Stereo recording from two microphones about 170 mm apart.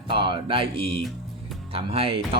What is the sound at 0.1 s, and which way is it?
Music, 30° right (ahead or behind).